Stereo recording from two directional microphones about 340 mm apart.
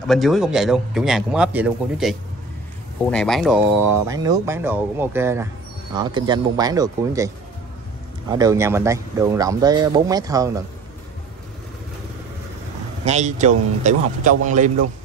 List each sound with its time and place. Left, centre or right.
0.1 s a man's voice: centre
8.3 s speech: centre
13.0 s speech: centre